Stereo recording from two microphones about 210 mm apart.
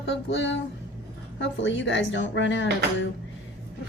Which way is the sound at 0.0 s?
55° left (ahead or behind).